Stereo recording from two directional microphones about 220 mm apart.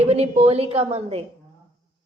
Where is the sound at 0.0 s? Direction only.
30° right (ahead or behind).